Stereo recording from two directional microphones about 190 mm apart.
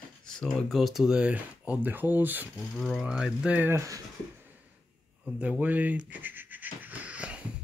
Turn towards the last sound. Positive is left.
turn(degrees=-5)  # may be behind; listen again after turning